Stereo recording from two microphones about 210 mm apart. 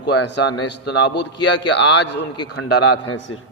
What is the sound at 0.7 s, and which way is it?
A man's voice, 55° left (ahead or behind).